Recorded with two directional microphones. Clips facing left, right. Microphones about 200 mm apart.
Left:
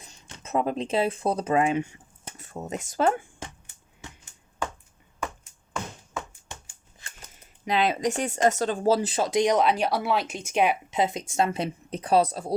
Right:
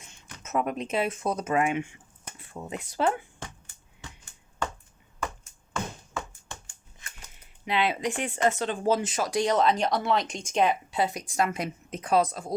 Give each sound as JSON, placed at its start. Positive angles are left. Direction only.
{"t": 0.0, "sound": "speech", "side_deg": 35}
{"t": 7.6, "sound": "speech", "side_deg": 40}